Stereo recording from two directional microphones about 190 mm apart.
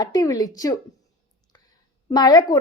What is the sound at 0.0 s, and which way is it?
A woman's voice, 20° left (ahead or behind).